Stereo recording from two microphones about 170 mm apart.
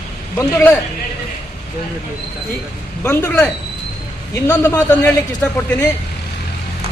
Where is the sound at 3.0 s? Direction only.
10° left (ahead or behind).